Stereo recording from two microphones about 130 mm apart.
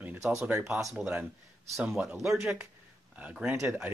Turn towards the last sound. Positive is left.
turn(degrees=-10)  # may be behind; listen again after turning